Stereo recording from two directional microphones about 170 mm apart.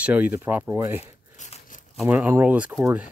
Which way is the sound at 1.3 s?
45° left (ahead or behind).